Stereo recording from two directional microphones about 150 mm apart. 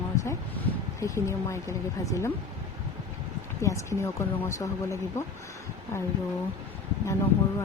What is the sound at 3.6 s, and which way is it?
Speech, 20° left (ahead or behind).